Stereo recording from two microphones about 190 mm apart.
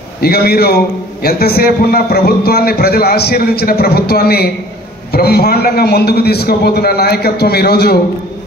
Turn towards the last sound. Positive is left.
turn(degrees=55)  # may be behind; listen again after turning